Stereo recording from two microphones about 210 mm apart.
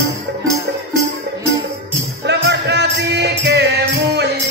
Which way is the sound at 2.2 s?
55° right (ahead or behind).